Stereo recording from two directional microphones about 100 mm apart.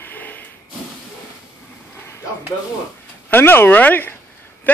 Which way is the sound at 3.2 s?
20° left (ahead or behind).